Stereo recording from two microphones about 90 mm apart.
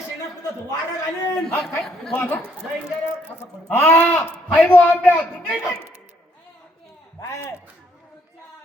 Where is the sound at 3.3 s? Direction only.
25° left (ahead or behind).